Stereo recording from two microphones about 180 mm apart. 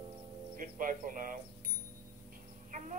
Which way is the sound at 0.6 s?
50° right (ahead or behind).